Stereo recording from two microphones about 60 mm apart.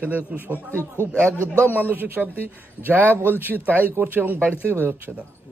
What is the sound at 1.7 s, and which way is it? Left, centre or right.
A man's voice, right.